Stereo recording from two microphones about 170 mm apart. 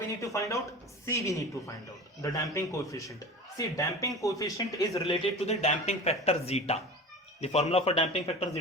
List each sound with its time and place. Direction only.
0.3 s speech: 20° left (ahead or behind)
5.5 s speech: 40° left (ahead or behind)